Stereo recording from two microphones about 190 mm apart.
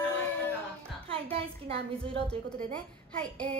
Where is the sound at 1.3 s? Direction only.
30° right (ahead or behind).